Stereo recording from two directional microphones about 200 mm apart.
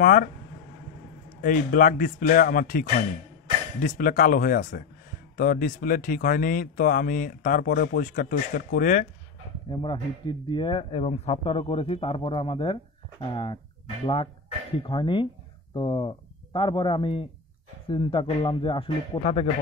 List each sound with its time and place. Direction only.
0.0 s speech: 45° left (ahead or behind)
1.4 s speech: 40° left (ahead or behind)
9.7 s speech: 25° left (ahead or behind)